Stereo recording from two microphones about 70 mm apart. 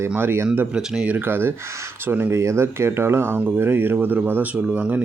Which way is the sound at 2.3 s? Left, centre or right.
Right.